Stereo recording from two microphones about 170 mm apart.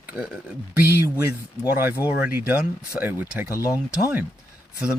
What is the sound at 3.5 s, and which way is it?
Speech, 20° left (ahead or behind).